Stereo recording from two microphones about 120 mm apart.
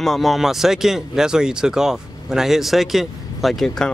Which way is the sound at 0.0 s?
Centre (ahead or behind).